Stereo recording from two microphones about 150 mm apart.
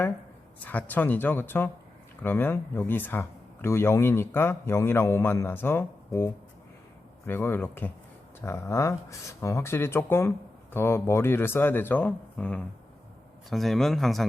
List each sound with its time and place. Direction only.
0.6 s speech: 10° left (ahead or behind)